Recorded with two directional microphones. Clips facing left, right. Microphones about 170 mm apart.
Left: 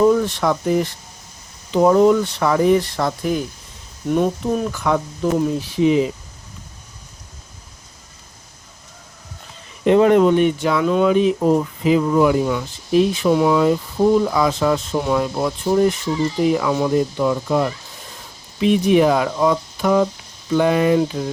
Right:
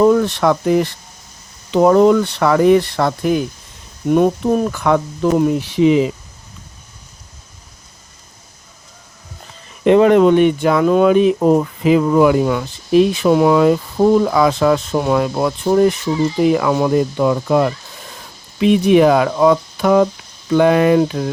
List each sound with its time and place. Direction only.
0.0 s speech: 70° right (ahead or behind)
4.1 s speech: 50° right (ahead or behind)
4.8 s speech: 65° right (ahead or behind); by 6.0 s 85° right
9.8 s speech: 85° right